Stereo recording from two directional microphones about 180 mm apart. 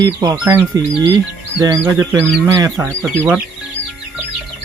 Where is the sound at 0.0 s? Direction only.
20° right (ahead or behind).